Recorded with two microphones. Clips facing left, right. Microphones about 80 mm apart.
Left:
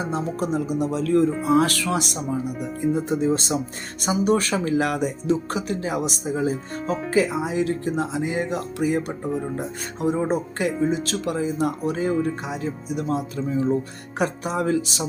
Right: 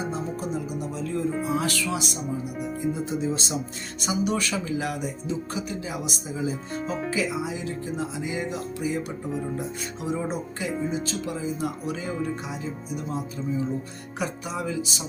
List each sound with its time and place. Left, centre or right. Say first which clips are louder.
0.0 s speech: left 4 dB; left
1.5 s speech: left 7 dB; left
14.2 s speech: left 6 dB; left